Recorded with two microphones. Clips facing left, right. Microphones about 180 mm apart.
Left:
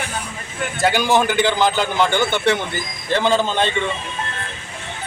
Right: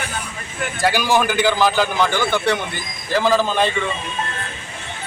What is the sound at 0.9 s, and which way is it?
Speech, 25° left (ahead or behind).